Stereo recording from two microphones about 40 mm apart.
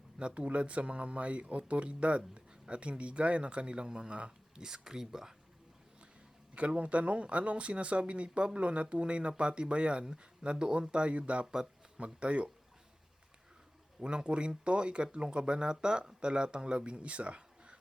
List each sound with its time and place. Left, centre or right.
0.2 s speech: right; by 5.3 s centre
6.6 s speech: right
14.0 s speech: right